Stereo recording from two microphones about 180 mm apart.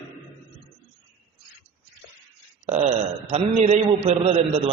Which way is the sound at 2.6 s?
40° right (ahead or behind).